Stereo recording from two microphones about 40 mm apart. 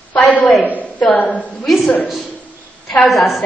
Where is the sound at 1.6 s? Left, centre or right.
Centre.